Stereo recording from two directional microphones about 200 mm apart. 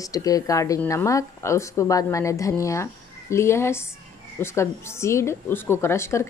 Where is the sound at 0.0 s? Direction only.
15° left (ahead or behind).